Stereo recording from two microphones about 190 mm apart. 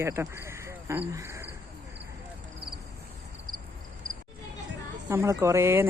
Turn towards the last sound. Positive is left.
turn(degrees=-15)  # may be behind; listen again after turning